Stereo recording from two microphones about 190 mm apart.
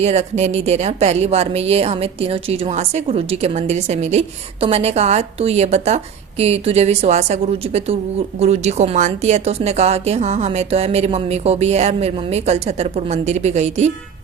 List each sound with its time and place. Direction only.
0.0 s a woman's voice: 35° right (ahead or behind)